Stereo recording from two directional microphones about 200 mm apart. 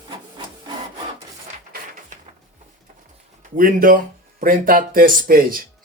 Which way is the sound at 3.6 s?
45° right (ahead or behind).